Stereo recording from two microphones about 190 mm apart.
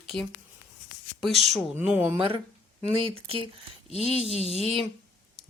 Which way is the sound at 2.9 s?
30° right (ahead or behind).